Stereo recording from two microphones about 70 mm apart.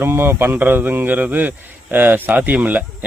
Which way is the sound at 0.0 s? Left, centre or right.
Right.